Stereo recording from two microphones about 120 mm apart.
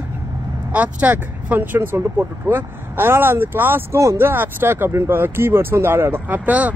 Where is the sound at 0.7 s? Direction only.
10° right (ahead or behind).